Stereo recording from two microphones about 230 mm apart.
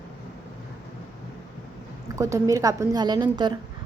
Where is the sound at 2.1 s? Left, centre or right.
Centre.